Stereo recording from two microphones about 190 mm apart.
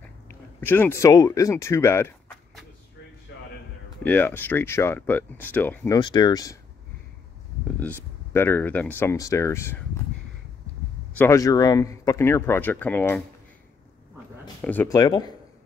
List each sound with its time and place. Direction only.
0.6 s speech: 10° left (ahead or behind)
4.0 s speech: 10° left (ahead or behind)
5.9 s speech: 25° left (ahead or behind)
7.8 s speech: 10° left (ahead or behind)
11.1 s speech: 15° left (ahead or behind)
14.6 s speech: 10° left (ahead or behind)